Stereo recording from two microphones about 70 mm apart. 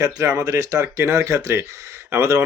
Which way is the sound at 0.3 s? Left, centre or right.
Right.